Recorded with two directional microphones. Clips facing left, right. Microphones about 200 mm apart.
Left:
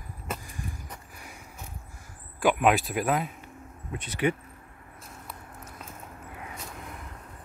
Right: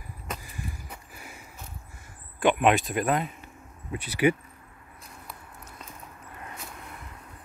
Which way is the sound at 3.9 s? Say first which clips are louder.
Right 4 dB; 10° right (ahead or behind).